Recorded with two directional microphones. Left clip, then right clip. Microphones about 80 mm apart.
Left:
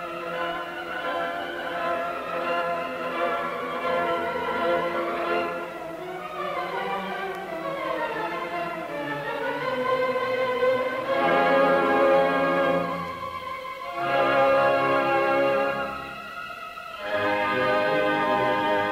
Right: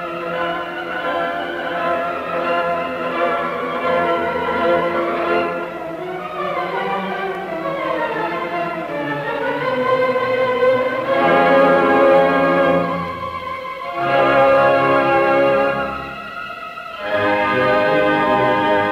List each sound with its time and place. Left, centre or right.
1.0 s music: right
17.1 s music: right